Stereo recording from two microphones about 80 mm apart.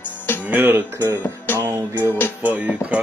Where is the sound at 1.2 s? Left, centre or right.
Left.